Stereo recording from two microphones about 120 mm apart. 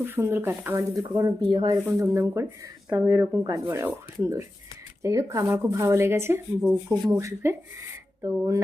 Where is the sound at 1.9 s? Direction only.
25° right (ahead or behind).